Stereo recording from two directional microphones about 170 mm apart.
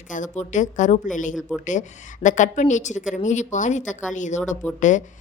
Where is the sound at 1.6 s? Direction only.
45° left (ahead or behind).